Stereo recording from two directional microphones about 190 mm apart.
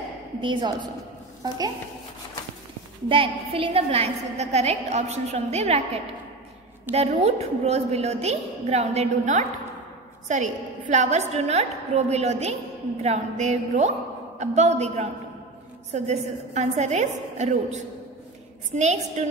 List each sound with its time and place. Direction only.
0.4 s a woman's voice: 25° right (ahead or behind)
3.1 s a woman's voice: 30° right (ahead or behind)
6.9 s a woman's voice: 35° right (ahead or behind)